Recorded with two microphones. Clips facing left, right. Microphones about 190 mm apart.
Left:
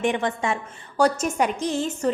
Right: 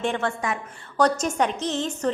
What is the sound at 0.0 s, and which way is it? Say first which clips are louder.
Speech: left 2 dB; 15° left (ahead or behind).